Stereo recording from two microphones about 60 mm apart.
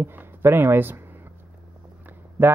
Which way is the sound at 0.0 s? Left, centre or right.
Right.